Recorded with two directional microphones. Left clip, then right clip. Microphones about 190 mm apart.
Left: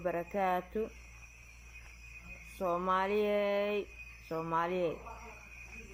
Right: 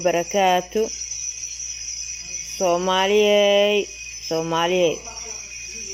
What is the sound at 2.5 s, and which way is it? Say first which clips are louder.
Speech: right 12 dB; 40° right (ahead or behind).